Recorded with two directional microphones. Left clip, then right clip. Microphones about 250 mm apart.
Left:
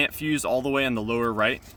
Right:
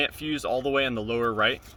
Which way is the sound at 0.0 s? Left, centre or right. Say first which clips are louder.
Left 3 dB; left.